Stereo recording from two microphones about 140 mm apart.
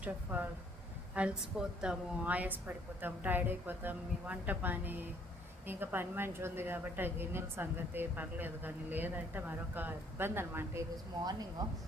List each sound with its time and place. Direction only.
0.0 s a woman's voice: 10° right (ahead or behind)
10.9 s speech: 30° right (ahead or behind)